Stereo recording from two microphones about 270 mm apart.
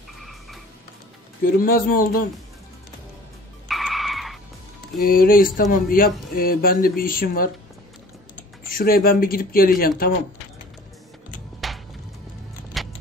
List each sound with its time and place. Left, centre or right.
0.2 s vehicle: centre
1.4 s speech: left
3.6 s vehicle: centre
5.0 s speech: left
8.6 s speech: left
11.6 s music: centre
12.7 s vehicle: centre